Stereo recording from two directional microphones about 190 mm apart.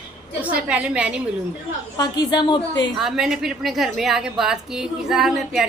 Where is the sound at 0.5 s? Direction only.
5° right (ahead or behind).